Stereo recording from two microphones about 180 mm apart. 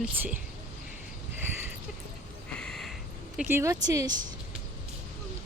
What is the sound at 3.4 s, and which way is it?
Speech, 10° right (ahead or behind).